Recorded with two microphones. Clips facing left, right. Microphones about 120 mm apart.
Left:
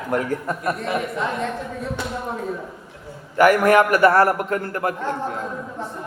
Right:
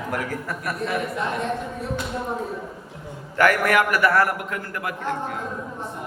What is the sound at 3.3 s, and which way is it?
Speech, 15° left (ahead or behind).